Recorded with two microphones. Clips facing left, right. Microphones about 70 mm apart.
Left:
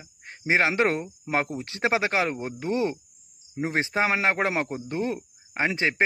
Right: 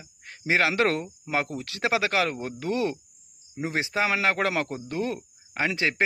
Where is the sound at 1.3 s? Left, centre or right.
Left.